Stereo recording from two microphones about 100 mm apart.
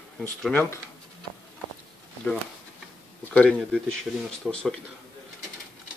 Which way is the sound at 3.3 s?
10° left (ahead or behind).